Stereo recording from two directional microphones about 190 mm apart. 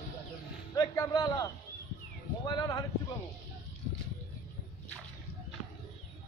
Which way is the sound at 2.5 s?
20° left (ahead or behind).